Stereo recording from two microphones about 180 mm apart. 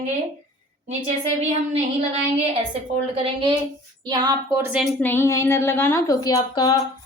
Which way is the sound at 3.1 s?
30° right (ahead or behind).